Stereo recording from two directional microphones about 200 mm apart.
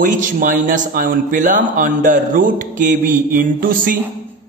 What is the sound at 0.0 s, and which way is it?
A man's voice, 40° right (ahead or behind).